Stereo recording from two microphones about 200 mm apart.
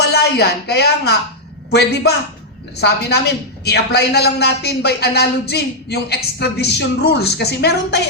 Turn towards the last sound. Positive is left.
turn(degrees=55)  # may be behind; listen again after turning